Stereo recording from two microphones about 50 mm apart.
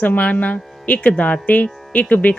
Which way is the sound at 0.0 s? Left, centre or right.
Left.